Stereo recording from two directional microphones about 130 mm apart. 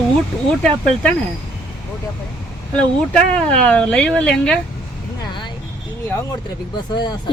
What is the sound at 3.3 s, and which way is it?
Speech, 10° left (ahead or behind).